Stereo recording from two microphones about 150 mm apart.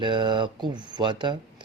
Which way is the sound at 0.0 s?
30° right (ahead or behind).